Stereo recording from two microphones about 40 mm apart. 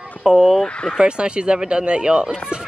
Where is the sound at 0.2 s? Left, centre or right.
Centre.